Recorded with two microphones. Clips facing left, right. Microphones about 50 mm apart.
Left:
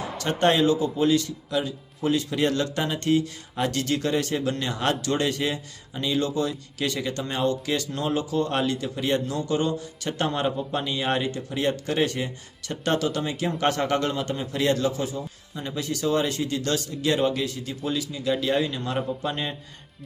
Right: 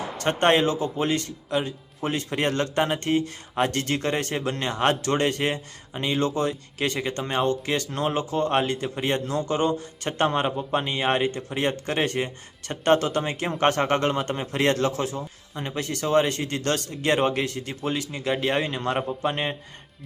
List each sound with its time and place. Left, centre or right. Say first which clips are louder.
0.2 s speech: right 1 dB; right